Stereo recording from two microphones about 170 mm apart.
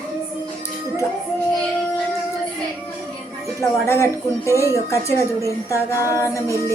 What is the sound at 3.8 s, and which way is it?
Speech, 15° left (ahead or behind).